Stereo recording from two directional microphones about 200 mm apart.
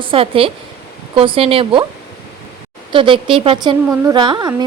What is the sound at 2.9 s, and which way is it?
Speech, 25° right (ahead or behind).